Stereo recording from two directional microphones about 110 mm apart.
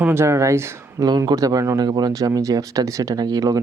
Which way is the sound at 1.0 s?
35° right (ahead or behind).